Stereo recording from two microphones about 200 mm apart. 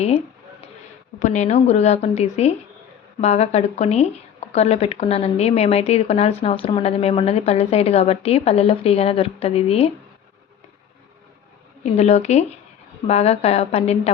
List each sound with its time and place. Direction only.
1.2 s speech: 35° left (ahead or behind)
11.8 s speech: 35° left (ahead or behind)